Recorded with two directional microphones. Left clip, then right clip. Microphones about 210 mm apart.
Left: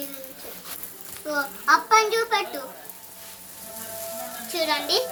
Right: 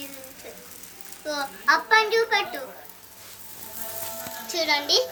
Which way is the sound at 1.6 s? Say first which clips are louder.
Left 1 dB; 30° left (ahead or behind).